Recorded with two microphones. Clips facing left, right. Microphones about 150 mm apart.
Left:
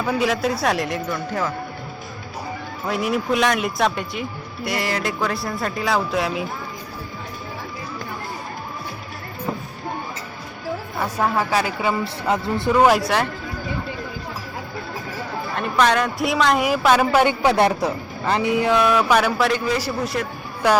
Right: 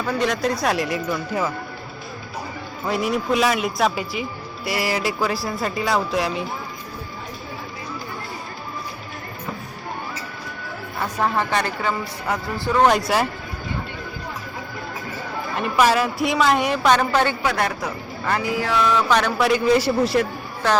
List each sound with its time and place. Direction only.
0.0 s speech: 5° left (ahead or behind)
2.8 s speech: centre (ahead or behind)
11.2 s a woman's voice: 5° left (ahead or behind)
12.3 s speech: 20° left (ahead or behind)
15.5 s speech: 5° right (ahead or behind)
17.4 s speech: 25° left (ahead or behind); by 19.5 s 10° left (ahead or behind)
20.6 s a woman's voice: 10° left (ahead or behind)